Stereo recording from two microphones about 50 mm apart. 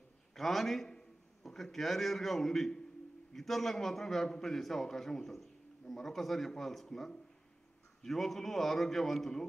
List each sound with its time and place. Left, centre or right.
0.3 s a man's voice: centre